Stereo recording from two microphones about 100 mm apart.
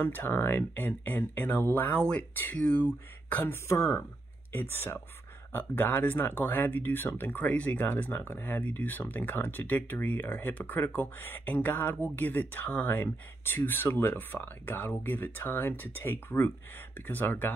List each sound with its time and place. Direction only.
0.0 s speech: 20° left (ahead or behind)
2.3 s speech: 20° left (ahead or behind)
3.6 s speech: 30° left (ahead or behind)